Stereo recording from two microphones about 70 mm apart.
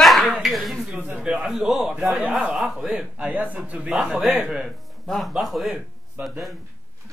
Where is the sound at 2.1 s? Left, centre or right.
Right.